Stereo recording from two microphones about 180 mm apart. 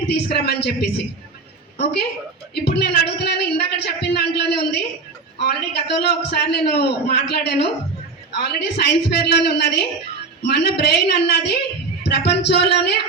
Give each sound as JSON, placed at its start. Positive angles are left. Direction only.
{"t": 0.3, "sound": "a man's voice", "side_deg": 65}